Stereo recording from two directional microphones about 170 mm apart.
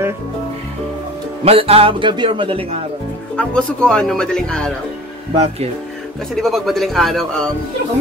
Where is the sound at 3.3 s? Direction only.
5° left (ahead or behind).